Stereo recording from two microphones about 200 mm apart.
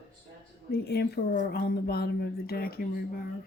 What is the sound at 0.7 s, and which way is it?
A woman's voice, 50° left (ahead or behind).